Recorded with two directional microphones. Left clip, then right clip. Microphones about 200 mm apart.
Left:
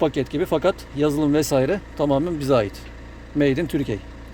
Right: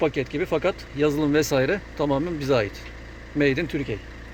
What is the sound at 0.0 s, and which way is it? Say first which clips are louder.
A man's voice: left 2 dB; 20° left (ahead or behind).